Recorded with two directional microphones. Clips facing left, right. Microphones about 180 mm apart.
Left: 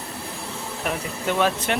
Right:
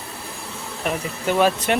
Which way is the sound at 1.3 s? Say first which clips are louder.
Right 4 dB; 10° right (ahead or behind).